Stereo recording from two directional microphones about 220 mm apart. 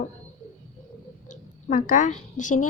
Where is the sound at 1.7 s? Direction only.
35° left (ahead or behind).